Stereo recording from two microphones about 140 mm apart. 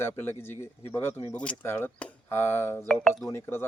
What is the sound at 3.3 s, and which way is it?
Speech, 15° left (ahead or behind).